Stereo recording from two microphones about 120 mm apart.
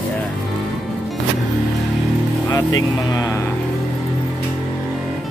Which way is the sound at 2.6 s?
30° left (ahead or behind).